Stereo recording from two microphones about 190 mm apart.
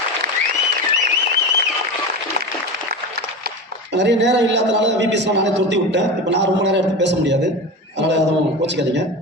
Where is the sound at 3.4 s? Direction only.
65° right (ahead or behind).